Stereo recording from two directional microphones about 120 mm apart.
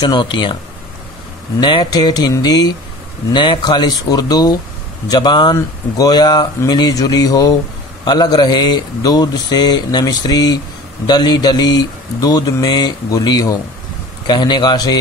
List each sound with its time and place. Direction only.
0.0 s speech: 40° left (ahead or behind)
1.6 s speech: 40° left (ahead or behind)